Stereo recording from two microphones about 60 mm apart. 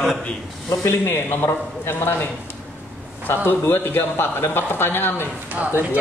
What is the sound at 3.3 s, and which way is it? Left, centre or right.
Speech, left.